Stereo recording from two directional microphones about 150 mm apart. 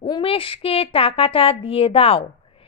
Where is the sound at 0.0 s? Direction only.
35° left (ahead or behind).